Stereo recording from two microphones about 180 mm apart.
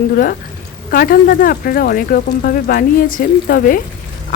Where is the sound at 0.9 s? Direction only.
55° left (ahead or behind).